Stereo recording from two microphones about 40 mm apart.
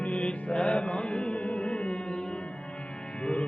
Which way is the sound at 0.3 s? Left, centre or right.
Left.